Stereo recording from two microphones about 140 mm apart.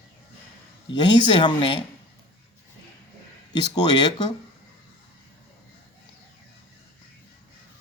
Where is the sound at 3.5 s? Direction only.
30° left (ahead or behind).